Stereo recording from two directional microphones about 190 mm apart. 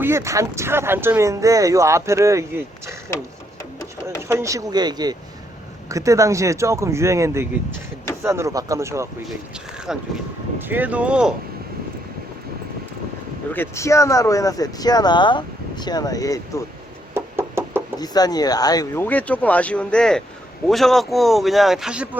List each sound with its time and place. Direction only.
0.0 s speech: 15° right (ahead or behind)
4.2 s speech: 15° right (ahead or behind)
9.7 s vehicle: 5° right (ahead or behind)
10.6 s speech: 10° right (ahead or behind)
13.5 s speech: 15° left (ahead or behind)
17.2 s knock: 10° right (ahead or behind)
18.0 s speech: 20° left (ahead or behind)
19.0 s speech: 10° left (ahead or behind)